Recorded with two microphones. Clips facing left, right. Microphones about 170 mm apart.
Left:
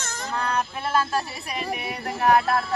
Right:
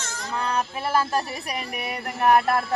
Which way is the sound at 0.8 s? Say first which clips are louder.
Right 2 dB; 10° right (ahead or behind).